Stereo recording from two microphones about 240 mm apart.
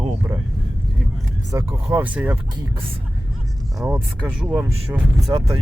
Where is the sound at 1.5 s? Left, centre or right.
Centre.